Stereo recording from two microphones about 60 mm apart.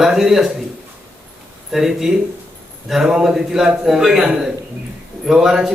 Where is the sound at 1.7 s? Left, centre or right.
Centre.